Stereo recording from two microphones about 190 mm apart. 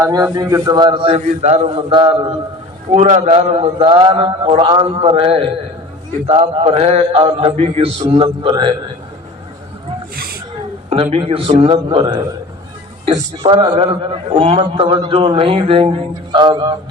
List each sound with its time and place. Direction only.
0.0 s a man's voice: 15° right (ahead or behind)
2.9 s a man's voice: 35° right (ahead or behind)
6.2 s mantra: 35° right (ahead or behind)
8.0 s a man's voice: 25° right (ahead or behind)
10.8 s a man's voice: 30° right (ahead or behind)